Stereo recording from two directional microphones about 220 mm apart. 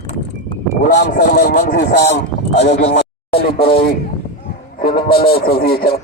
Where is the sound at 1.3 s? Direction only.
45° left (ahead or behind).